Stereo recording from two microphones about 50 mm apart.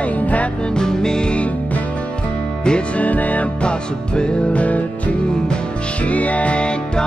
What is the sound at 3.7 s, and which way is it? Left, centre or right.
Music, centre.